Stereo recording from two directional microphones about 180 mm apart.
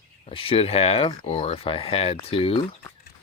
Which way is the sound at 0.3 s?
30° left (ahead or behind).